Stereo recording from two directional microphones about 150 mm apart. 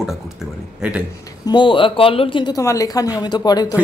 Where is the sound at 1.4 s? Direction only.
30° left (ahead or behind).